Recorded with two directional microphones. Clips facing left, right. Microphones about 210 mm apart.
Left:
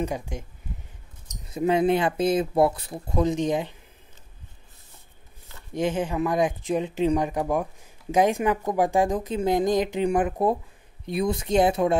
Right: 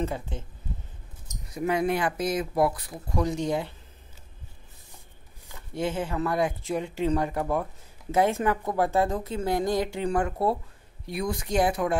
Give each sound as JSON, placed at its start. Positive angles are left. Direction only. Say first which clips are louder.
{"t": 0.0, "sound": "speech", "louder": "left 2 dB", "side_deg": 15}
{"t": 1.2, "sound": "speech", "louder": "left 4 dB", "side_deg": 25}
{"t": 5.8, "sound": "speech", "louder": "left 3 dB", "side_deg": 15}